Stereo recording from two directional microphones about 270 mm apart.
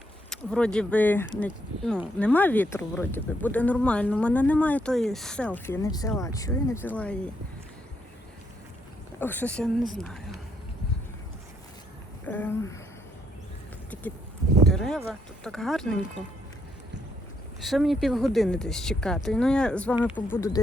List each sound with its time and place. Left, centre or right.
0.3 s speech: centre
9.2 s speech: centre
12.2 s speech: centre
13.9 s a sound: centre
14.7 s speech: centre
17.6 s speech: centre